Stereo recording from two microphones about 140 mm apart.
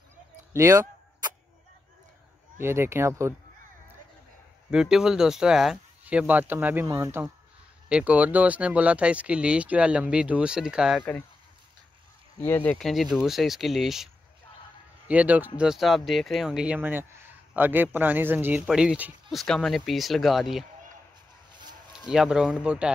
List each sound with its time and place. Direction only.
0.5 s a sound: 20° right (ahead or behind)
2.6 s speech: 20° right (ahead or behind)
4.6 s speech: 5° right (ahead or behind)
11.0 s speech: 10° left (ahead or behind)
12.4 s speech: 15° left (ahead or behind)
12.7 s speech: centre (ahead or behind)
19.3 s speech: 5° left (ahead or behind)
21.5 s a sound: 30° right (ahead or behind)
21.9 s speech: 5° right (ahead or behind)